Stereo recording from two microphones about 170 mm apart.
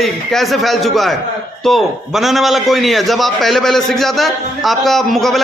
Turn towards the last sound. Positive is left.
turn(degrees=0)  # may be behind; listen again after turning